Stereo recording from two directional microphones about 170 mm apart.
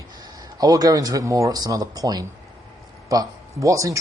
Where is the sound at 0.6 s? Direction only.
20° right (ahead or behind).